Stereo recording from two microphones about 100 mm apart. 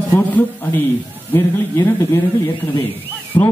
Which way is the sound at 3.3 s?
55° left (ahead or behind).